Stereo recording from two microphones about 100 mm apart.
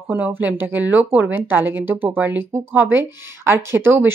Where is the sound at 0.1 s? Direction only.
20° right (ahead or behind).